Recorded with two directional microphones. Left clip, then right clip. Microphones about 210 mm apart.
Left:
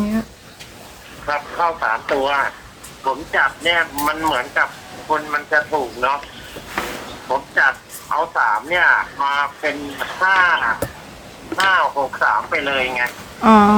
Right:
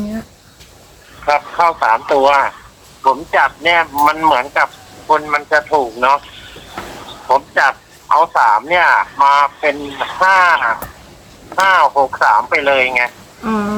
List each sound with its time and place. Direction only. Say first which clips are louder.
1.2 s speech: right 7 dB; 50° right (ahead or behind)
7.3 s speech: right 4 dB; 50° right (ahead or behind)
13.4 s speech: left 8 dB; 30° left (ahead or behind)